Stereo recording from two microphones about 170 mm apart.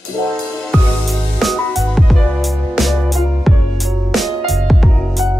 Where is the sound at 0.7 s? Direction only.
Centre (ahead or behind).